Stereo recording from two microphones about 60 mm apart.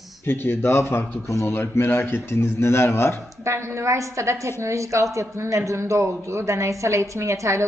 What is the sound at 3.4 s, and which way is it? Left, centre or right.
Speech, right.